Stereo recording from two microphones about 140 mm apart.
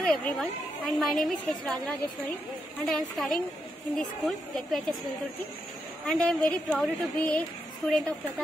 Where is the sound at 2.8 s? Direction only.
Centre (ahead or behind).